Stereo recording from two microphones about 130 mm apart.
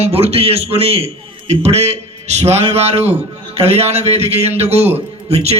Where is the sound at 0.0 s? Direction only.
50° right (ahead or behind).